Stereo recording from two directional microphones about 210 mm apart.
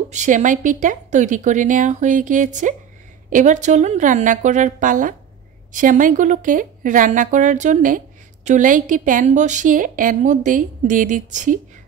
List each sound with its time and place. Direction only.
0.1 s a woman's voice: 35° right (ahead or behind)